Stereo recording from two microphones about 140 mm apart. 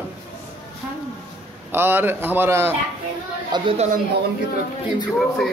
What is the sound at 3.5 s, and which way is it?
Speech, 30° right (ahead or behind).